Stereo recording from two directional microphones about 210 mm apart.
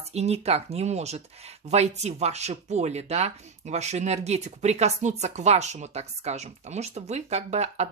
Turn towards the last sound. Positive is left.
turn(degrees=-30)  # may be behind; listen again after turning